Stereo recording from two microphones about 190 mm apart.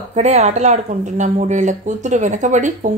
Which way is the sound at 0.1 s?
35° right (ahead or behind).